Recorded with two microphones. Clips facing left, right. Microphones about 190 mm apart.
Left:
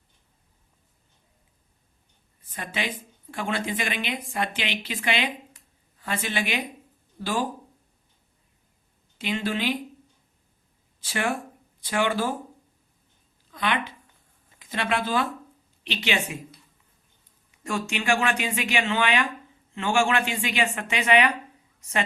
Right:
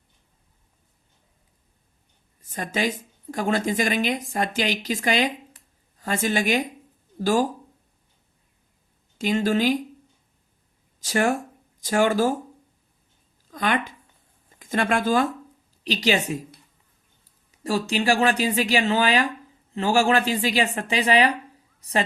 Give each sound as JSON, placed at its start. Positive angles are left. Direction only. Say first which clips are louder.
{"t": 2.4, "sound": "speech", "louder": "right 6 dB", "side_deg": -45}
{"t": 9.1, "sound": "speech", "louder": "right 6 dB", "side_deg": -45}
{"t": 11.0, "sound": "speech", "louder": "right 6 dB", "side_deg": -40}
{"t": 13.5, "sound": "a woman's voice", "louder": "right 3 dB", "side_deg": -45}